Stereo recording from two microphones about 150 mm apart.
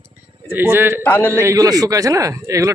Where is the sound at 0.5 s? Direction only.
15° right (ahead or behind).